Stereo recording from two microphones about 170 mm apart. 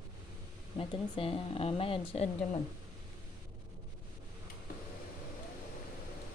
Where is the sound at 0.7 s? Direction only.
30° left (ahead or behind).